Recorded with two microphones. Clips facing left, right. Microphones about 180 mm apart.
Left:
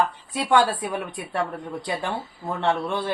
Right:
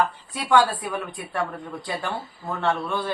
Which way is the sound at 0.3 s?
20° left (ahead or behind).